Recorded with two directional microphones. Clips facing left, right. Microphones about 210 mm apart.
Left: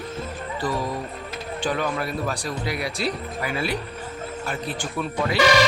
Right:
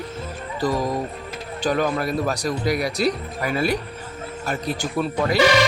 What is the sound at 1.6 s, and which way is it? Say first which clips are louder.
Speech: right 4 dB; 40° right (ahead or behind).